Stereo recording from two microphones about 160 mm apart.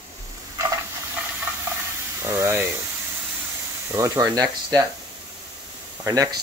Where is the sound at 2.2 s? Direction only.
15° right (ahead or behind).